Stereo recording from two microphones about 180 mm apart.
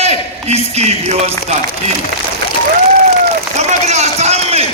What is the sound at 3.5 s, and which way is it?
Run, 40° right (ahead or behind).